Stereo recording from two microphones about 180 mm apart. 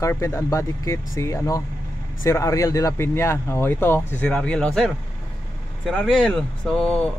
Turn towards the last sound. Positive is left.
turn(degrees=5)  # may be behind; listen again after turning